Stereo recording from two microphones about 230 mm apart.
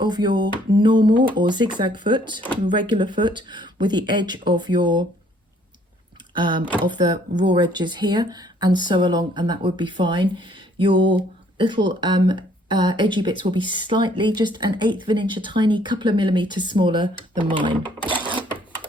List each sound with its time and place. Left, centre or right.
0.0 s speech: centre
6.3 s speech: centre
18.1 s cash register: right